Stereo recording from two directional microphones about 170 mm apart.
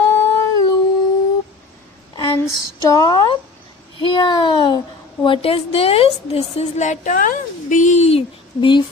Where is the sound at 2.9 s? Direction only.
25° left (ahead or behind).